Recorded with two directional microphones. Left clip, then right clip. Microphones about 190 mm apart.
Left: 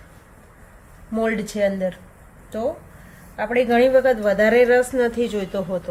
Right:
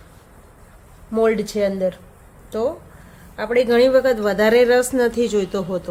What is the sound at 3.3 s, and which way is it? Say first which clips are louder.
A woman's voice: right 2 dB; 35° right (ahead or behind).